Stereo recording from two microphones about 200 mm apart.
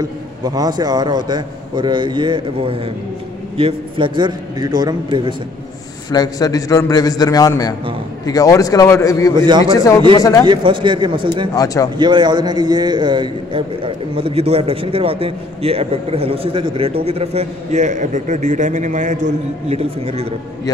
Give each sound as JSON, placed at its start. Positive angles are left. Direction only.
{"t": 0.6, "sound": "a man's voice", "side_deg": -20}
{"t": 6.1, "sound": "a man's voice", "side_deg": 20}
{"t": 9.4, "sound": "a man's voice", "side_deg": -20}
{"t": 10.1, "sound": "a man's voice", "side_deg": 15}
{"t": 10.4, "sound": "a man's voice", "side_deg": -25}
{"t": 11.5, "sound": "a man's voice", "side_deg": 15}
{"t": 12.0, "sound": "a man's voice", "side_deg": -20}